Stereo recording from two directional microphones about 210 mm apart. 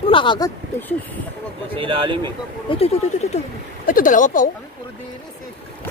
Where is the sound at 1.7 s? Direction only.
25° right (ahead or behind).